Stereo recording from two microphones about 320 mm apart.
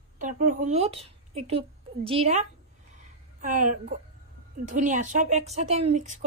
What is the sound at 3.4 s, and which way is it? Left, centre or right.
A woman's voice, right.